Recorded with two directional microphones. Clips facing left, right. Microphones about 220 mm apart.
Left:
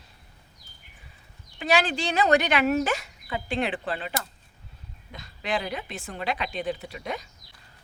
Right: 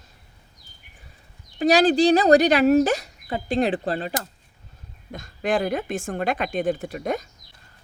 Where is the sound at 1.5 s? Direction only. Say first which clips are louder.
Right 8 dB; 40° right (ahead or behind).